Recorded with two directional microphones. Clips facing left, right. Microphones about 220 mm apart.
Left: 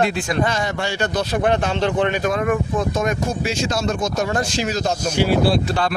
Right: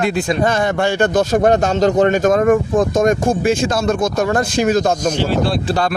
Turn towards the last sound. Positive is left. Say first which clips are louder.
# right 4 dB
turn(degrees=-40)  # may be behind; listen again after turning